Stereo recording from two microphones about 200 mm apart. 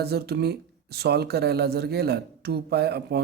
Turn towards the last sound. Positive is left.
turn(degrees=-55)  # may be behind; listen again after turning